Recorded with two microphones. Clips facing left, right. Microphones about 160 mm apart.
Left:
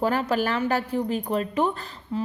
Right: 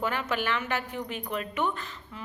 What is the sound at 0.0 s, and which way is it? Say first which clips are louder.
A woman's voice: left 6 dB; 35° left (ahead or behind).